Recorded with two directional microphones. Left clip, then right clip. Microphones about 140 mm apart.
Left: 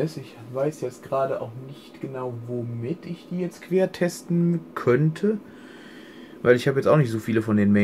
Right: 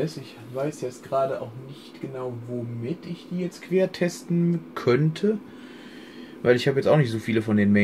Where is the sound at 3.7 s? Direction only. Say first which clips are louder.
Left 1 dB; 5° left (ahead or behind).